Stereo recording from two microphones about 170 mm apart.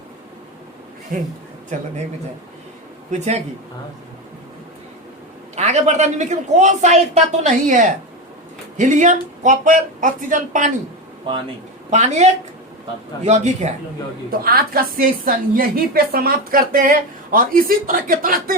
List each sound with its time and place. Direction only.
1.1 s a woman's voice: 55° right (ahead or behind)
3.1 s speech: 40° right (ahead or behind)
5.5 s a woman's voice: 40° right (ahead or behind)
11.9 s a woman's voice: 45° right (ahead or behind)
14.3 s a woman's voice: 60° right (ahead or behind)